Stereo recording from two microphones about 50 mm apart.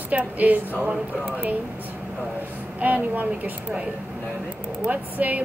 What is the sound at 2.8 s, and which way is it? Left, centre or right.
Speech, right.